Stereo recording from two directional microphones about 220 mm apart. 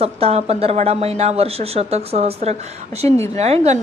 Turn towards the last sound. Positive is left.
turn(degrees=-30)  # may be behind; listen again after turning